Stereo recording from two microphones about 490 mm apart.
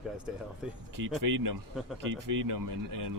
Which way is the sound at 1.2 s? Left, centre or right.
Right.